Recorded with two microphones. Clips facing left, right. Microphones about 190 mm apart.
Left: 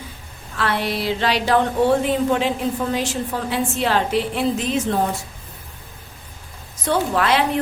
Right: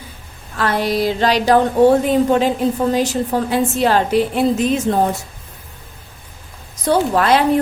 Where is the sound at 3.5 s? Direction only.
45° right (ahead or behind).